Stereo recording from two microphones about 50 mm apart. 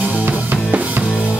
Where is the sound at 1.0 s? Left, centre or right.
Left.